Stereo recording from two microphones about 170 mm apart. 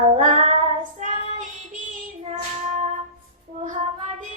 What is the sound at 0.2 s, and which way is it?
Child singing, 45° right (ahead or behind).